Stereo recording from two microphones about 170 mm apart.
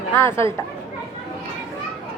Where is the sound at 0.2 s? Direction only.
15° left (ahead or behind).